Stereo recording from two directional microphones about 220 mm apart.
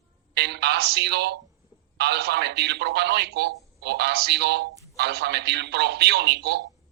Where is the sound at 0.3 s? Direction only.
50° right (ahead or behind).